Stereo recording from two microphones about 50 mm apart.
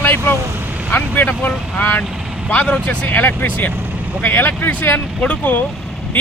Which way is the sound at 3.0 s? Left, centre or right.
Left.